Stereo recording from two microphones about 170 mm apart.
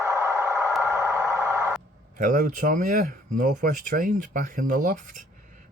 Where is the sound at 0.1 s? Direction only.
20° right (ahead or behind).